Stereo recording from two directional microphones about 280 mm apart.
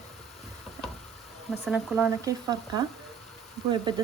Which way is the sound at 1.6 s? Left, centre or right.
Centre.